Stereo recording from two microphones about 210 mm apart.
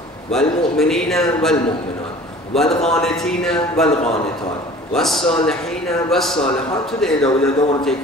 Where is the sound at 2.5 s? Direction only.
Centre (ahead or behind).